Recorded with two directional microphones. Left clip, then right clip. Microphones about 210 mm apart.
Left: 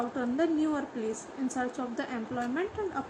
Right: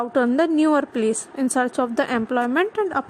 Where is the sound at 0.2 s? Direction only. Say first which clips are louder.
Right 12 dB; 50° right (ahead or behind).